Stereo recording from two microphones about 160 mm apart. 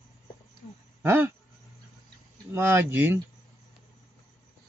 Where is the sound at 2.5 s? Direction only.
15° right (ahead or behind).